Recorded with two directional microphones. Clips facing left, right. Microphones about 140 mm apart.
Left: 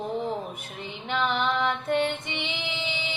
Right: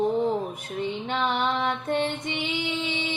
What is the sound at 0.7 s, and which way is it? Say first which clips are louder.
Female singing: right 3 dB; 35° right (ahead or behind).